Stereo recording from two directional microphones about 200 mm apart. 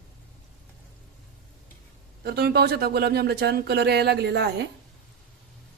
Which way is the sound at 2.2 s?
55° right (ahead or behind).